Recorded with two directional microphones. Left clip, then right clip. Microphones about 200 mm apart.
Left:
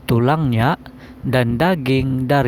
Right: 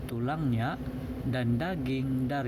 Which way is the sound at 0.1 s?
55° left (ahead or behind).